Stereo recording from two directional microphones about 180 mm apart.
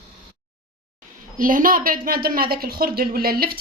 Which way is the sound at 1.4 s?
50° right (ahead or behind).